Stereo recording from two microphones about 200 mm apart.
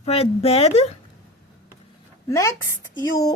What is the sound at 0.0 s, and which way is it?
Speech, 30° left (ahead or behind).